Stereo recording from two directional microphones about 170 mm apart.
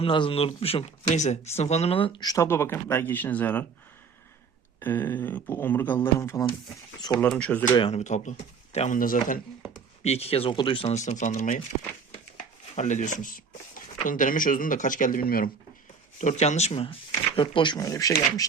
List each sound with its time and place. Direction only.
0.0 s speech: 30° left (ahead or behind); by 3.7 s 10° left (ahead or behind)
4.8 s speech: 10° left (ahead or behind)
7.7 s speech: 30° left (ahead or behind)
7.9 s speech: 45° left (ahead or behind)
10.0 s speech: 35° left (ahead or behind)
10.9 s speech: 45° left (ahead or behind)
12.7 s speech: 45° left (ahead or behind); by 15.4 s 60° left (ahead or behind)
16.1 s speech: 45° left (ahead or behind); by 18.1 s 20° left (ahead or behind)